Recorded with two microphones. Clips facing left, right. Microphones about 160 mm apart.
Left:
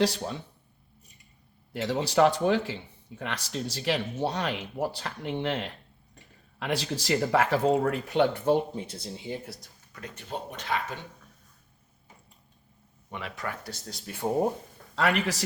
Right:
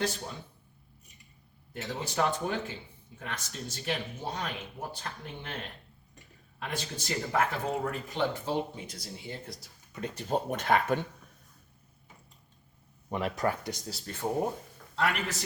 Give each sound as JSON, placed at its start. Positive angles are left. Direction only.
{"t": 1.7, "sound": "speech", "side_deg": 85}
{"t": 8.7, "sound": "speech", "side_deg": 25}
{"t": 10.2, "sound": "speech", "side_deg": -45}
{"t": 13.1, "sound": "speech", "side_deg": -40}
{"t": 13.7, "sound": "speech", "side_deg": -15}
{"t": 13.9, "sound": "speech", "side_deg": 5}
{"t": 14.9, "sound": "speech", "side_deg": 90}